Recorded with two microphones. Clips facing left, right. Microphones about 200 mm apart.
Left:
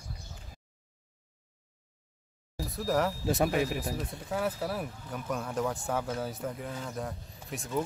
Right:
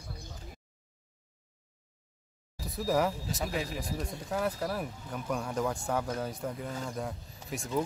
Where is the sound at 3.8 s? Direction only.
5° left (ahead or behind).